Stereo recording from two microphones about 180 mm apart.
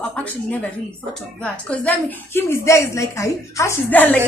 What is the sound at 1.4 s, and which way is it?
A woman's voice, 5° left (ahead or behind).